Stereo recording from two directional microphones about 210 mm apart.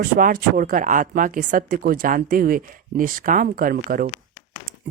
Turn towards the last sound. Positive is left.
turn(degrees=-45)  # may be behind; listen again after turning